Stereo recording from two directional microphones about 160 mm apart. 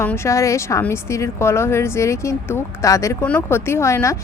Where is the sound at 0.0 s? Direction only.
15° left (ahead or behind).